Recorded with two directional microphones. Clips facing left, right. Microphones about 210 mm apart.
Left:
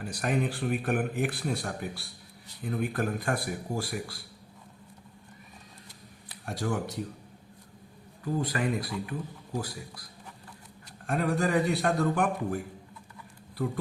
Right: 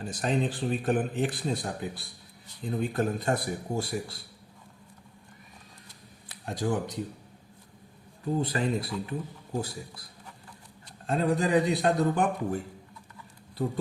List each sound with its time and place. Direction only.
0.0 s speech: 25° right (ahead or behind)
6.4 s speech: 20° right (ahead or behind)
8.2 s speech: 25° right (ahead or behind)